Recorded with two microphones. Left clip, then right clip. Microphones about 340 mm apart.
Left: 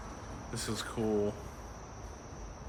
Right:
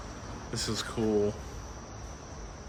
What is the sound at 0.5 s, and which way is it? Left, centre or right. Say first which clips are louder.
Speech: right 4 dB; centre.